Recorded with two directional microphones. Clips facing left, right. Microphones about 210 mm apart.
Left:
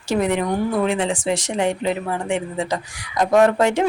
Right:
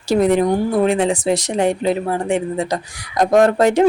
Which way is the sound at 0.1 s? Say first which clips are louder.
Right 5 dB; 35° right (ahead or behind).